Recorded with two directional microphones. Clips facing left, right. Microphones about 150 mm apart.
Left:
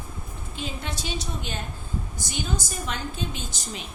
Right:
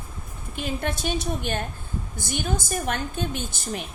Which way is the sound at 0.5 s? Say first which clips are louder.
Right 6 dB; 55° right (ahead or behind).